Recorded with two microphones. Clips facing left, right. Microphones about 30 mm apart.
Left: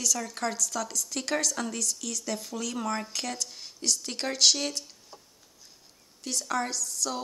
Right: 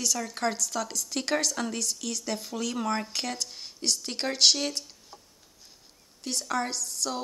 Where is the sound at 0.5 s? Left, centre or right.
Right.